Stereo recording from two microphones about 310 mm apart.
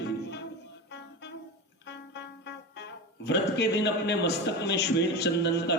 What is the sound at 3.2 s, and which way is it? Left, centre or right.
A man's voice, left.